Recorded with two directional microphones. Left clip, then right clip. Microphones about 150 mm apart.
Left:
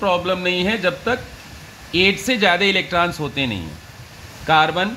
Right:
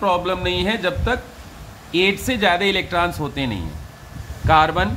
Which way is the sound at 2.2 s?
25° left (ahead or behind).